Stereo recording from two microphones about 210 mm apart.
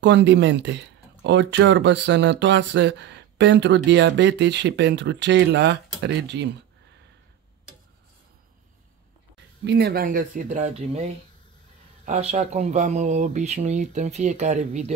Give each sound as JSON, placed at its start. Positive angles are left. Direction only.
{"t": 0.0, "sound": "speech", "side_deg": -55}
{"t": 9.7, "sound": "speech", "side_deg": -50}
{"t": 12.1, "sound": "speech", "side_deg": -30}